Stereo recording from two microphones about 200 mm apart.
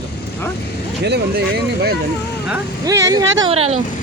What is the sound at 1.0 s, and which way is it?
Speech, 55° right (ahead or behind).